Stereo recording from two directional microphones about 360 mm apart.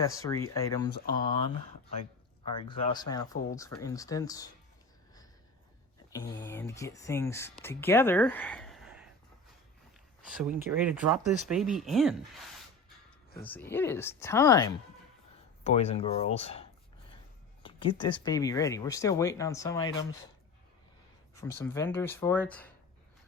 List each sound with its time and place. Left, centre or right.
0.0 s speech: centre
6.1 s speech: centre
10.2 s speech: centre
13.4 s speech: centre
21.3 s speech: centre